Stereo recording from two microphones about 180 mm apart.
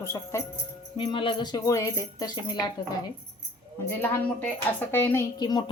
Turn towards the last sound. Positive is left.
turn(degrees=25)  # may be behind; listen again after turning